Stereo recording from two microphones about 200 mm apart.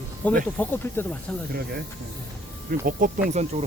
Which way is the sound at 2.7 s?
45° right (ahead or behind).